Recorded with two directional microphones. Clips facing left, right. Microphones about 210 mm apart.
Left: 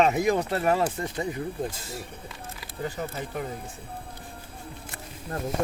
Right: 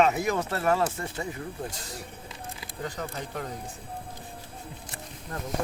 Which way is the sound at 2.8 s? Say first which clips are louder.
Left 3 dB; 5° left (ahead or behind).